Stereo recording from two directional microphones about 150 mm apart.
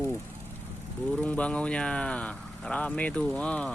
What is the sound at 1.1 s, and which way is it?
Speech, 10° left (ahead or behind).